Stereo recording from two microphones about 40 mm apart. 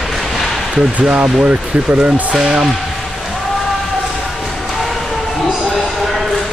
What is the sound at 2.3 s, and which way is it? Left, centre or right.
Speech, centre.